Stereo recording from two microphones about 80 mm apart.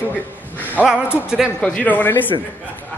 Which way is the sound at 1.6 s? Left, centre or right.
Centre.